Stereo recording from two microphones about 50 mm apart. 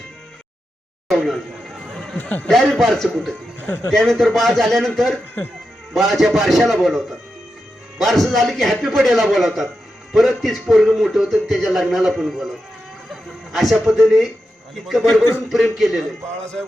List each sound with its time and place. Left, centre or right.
1.1 s chatter: centre
2.1 s speech: left
2.5 s a man's voice: centre
13.5 s a man's voice: centre